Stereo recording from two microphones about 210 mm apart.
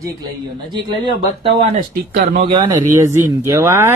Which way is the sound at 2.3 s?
25° right (ahead or behind).